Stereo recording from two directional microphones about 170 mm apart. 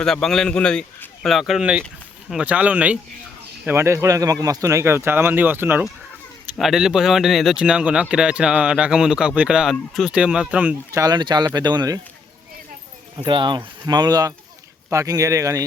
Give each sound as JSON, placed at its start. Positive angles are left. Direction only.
{"t": 0.0, "sound": "speech", "side_deg": 5}
{"t": 6.6, "sound": "speech", "side_deg": 0}
{"t": 11.0, "sound": "speech", "side_deg": -25}
{"t": 13.2, "sound": "speech", "side_deg": -25}